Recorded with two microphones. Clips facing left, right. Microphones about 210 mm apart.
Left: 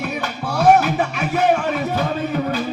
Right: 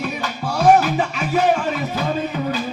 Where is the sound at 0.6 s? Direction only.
60° left (ahead or behind).